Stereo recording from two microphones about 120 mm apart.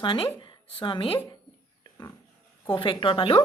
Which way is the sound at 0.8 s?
45° left (ahead or behind).